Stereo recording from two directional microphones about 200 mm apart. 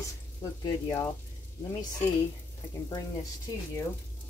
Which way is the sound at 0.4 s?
15° left (ahead or behind).